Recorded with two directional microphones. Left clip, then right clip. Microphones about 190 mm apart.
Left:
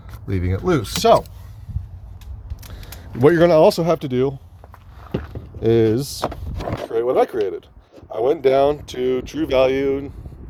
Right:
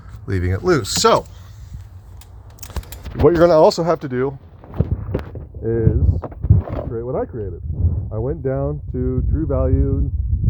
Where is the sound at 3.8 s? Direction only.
25° left (ahead or behind).